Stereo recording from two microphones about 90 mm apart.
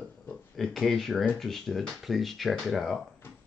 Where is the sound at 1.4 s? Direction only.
5° left (ahead or behind).